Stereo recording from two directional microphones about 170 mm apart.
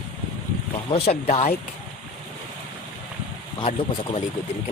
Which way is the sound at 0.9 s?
35° left (ahead or behind).